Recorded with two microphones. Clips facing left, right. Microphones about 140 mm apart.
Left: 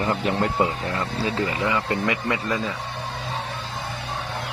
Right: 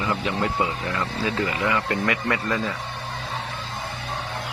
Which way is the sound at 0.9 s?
35° left (ahead or behind).